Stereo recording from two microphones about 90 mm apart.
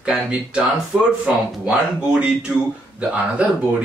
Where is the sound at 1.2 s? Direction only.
10° right (ahead or behind).